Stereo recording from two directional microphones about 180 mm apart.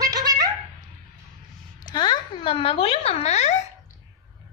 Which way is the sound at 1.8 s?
25° left (ahead or behind).